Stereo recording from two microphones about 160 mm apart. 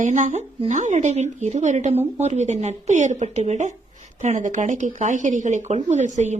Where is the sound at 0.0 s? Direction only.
50° right (ahead or behind).